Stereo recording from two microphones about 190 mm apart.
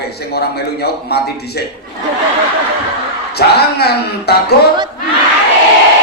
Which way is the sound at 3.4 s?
60° left (ahead or behind).